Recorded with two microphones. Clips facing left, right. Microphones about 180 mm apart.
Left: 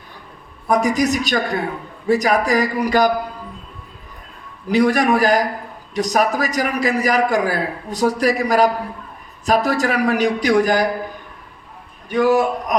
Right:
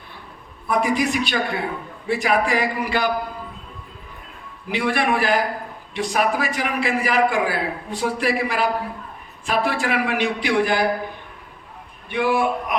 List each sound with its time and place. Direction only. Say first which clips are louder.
0.7 s a man's voice: left 4 dB; 40° left (ahead or behind)
4.7 s a man's voice: left 6 dB; 40° left (ahead or behind)
12.1 s a man's voice: left 5 dB; 40° left (ahead or behind)